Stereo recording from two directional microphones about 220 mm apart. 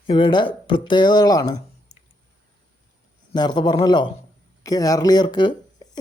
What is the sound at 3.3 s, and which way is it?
Speech, 20° left (ahead or behind).